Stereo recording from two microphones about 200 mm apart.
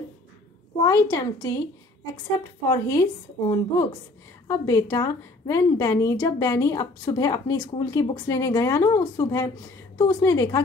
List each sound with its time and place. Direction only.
0.8 s a woman's voice: 20° left (ahead or behind)
2.7 s a woman's voice: 15° left (ahead or behind)